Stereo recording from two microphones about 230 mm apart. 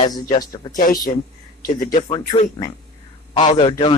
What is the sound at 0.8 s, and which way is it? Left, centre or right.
Speech, left.